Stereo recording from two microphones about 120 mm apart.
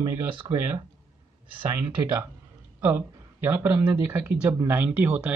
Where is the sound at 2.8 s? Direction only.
20° right (ahead or behind).